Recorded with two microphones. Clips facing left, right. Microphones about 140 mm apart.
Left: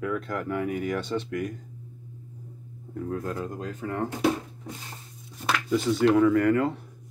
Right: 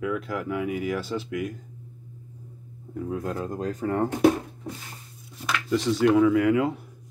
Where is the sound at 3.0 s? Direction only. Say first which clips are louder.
Right 1 dB; 15° right (ahead or behind).